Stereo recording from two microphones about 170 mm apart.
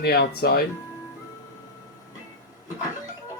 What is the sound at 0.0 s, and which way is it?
Speech, 65° left (ahead or behind).